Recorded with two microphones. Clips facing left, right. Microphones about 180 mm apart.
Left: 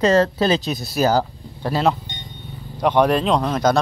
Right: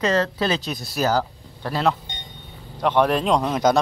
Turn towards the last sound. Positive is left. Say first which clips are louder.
# left 1 dB
turn(degrees=-10)  # may be behind; listen again after turning